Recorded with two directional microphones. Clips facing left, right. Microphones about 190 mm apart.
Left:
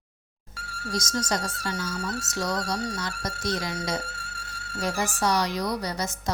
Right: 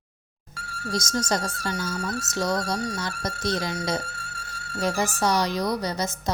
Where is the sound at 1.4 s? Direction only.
50° right (ahead or behind).